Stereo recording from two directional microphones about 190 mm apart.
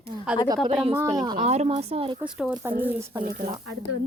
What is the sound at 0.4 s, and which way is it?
Speech, 20° right (ahead or behind).